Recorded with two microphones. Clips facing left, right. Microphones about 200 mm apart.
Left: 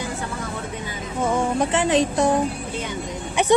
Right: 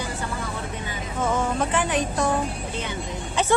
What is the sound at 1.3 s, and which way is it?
Speech, 15° left (ahead or behind).